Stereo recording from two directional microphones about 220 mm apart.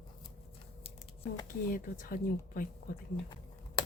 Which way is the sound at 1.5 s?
40° left (ahead or behind).